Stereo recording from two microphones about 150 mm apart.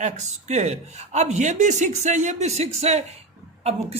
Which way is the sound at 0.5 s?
50° right (ahead or behind).